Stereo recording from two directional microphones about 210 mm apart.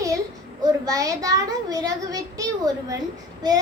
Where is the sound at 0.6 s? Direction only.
15° right (ahead or behind).